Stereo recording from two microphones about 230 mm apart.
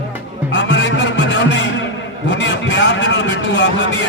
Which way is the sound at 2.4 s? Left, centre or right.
Left.